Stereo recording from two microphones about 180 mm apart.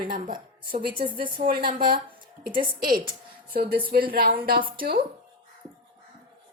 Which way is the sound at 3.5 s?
55° right (ahead or behind).